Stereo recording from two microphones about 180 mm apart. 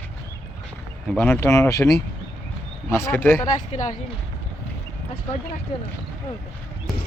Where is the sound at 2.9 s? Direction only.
15° left (ahead or behind).